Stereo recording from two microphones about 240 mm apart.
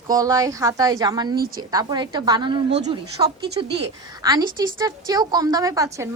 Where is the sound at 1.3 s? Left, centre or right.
Right.